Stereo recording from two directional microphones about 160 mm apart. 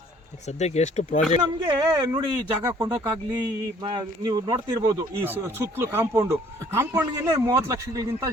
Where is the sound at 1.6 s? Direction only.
30° right (ahead or behind).